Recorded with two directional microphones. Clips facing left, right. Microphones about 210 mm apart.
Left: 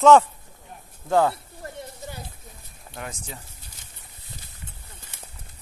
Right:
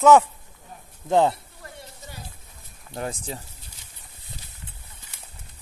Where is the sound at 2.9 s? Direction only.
35° right (ahead or behind).